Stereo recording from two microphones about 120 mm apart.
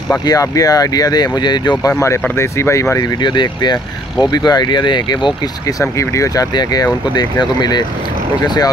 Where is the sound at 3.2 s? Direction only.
40° left (ahead or behind).